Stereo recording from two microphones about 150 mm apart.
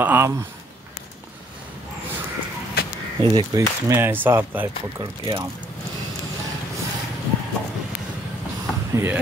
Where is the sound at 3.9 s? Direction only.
15° right (ahead or behind).